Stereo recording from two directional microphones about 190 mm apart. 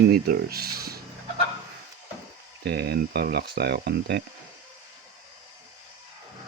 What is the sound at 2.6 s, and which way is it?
Speech, 60° right (ahead or behind).